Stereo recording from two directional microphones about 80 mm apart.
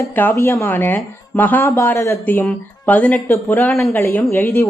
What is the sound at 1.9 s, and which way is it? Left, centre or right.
Speech, left.